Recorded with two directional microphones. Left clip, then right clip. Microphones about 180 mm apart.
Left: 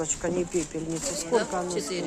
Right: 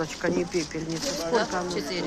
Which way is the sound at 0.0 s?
20° left (ahead or behind).